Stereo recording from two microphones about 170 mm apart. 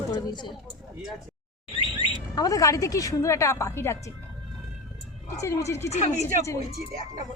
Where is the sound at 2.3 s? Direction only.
20° left (ahead or behind).